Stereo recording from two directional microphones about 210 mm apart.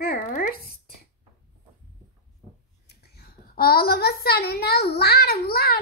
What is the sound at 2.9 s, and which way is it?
A child's voice, 50° left (ahead or behind).